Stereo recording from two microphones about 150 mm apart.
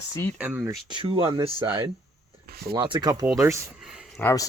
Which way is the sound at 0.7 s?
30° right (ahead or behind).